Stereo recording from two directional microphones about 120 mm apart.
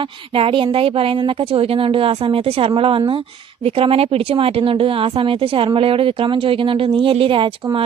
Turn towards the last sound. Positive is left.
turn(degrees=-45)  # may be behind; listen again after turning